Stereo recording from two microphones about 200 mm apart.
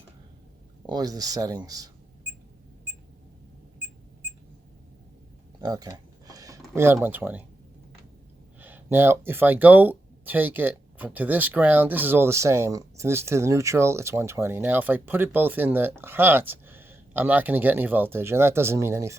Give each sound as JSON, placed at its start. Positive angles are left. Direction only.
{"t": 0.9, "sound": "speech", "side_deg": -20}
{"t": 5.5, "sound": "a sound", "side_deg": -20}
{"t": 6.7, "sound": "speech", "side_deg": -10}
{"t": 8.6, "sound": "speech", "side_deg": -10}